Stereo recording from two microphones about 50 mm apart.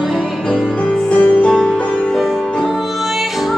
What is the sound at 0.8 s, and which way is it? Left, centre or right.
Music, left.